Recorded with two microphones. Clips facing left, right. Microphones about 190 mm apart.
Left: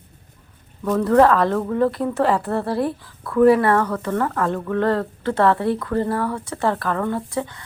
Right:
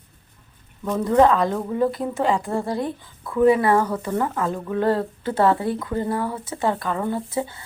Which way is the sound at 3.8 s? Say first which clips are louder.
Left 1 dB; 25° right (ahead or behind).